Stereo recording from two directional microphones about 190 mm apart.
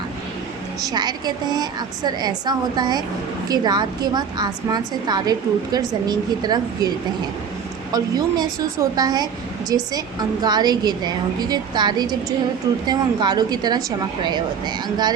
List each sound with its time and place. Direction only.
0.8 s a woman's voice: 20° right (ahead or behind)
7.9 s a woman's voice: 20° right (ahead or behind)